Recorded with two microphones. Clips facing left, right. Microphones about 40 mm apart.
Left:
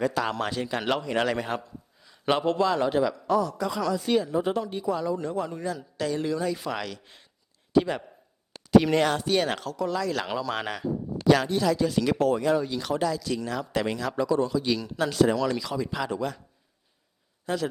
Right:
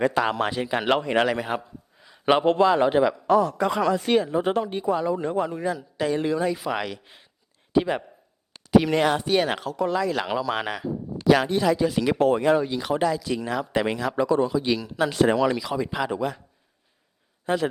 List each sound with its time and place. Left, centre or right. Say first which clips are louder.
0.0 s speech: right 4 dB; right
0.9 s speech: right 5 dB; right
1.3 s a man's voice: right 2 dB; centre
8.5 s speech: even; centre
9.7 s speech: right 6 dB; right
10.1 s speech: right 3 dB; centre
11.3 s speech: right 3 dB; right
12.2 s speech: right 6 dB; right
12.7 s speech: right 3 dB; centre
15.1 s speech: right 1 dB; right
15.5 s speech: right 3 dB; centre
17.4 s a man's voice: right 4 dB; right